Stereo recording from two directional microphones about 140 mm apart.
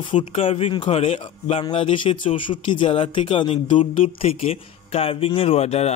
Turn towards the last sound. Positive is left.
turn(degrees=50)  # may be behind; listen again after turning